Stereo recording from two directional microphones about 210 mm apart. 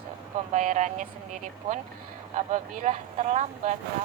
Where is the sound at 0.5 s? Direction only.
35° right (ahead or behind).